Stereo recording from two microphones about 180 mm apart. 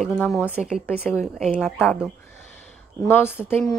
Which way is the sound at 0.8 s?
10° left (ahead or behind).